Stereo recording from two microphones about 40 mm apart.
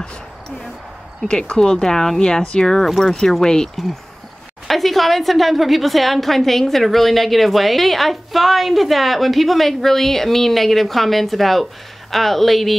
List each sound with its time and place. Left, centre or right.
1.2 s speech: left
1.6 s speech: centre
4.6 s a woman's voice: centre